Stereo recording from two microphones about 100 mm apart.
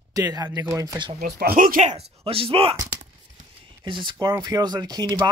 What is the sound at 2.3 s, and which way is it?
Speech, 70° right (ahead or behind).